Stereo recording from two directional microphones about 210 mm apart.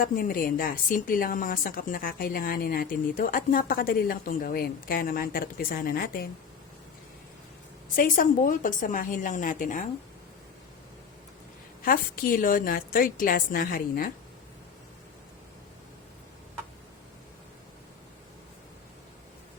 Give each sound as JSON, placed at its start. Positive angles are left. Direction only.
{"t": 0.0, "sound": "speech", "side_deg": 40}
{"t": 7.9, "sound": "a woman's voice", "side_deg": 40}
{"t": 11.9, "sound": "a woman's voice", "side_deg": 40}